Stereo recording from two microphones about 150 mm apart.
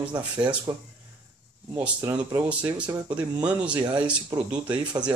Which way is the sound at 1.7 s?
10° right (ahead or behind).